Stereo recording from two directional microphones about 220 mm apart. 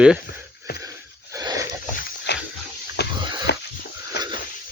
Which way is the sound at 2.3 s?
50° left (ahead or behind).